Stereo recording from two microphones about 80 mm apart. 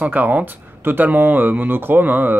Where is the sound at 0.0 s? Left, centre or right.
Right.